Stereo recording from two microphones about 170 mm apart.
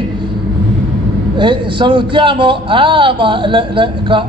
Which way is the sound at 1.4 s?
30° right (ahead or behind).